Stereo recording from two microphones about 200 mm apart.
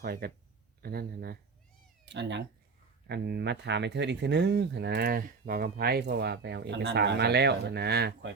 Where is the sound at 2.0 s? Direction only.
60° right (ahead or behind).